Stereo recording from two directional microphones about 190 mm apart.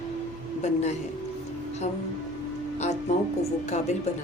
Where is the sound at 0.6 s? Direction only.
35° left (ahead or behind).